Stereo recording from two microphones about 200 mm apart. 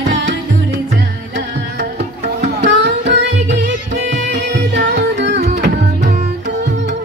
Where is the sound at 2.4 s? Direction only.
50° right (ahead or behind).